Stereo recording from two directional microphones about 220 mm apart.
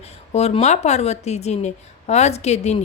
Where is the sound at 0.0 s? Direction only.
30° left (ahead or behind).